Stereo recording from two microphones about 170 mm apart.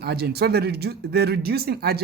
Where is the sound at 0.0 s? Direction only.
70° right (ahead or behind).